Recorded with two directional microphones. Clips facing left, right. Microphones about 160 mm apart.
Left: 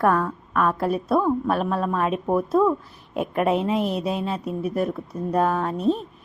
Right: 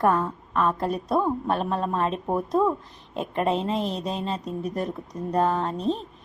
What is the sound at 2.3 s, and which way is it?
Speech, 20° right (ahead or behind).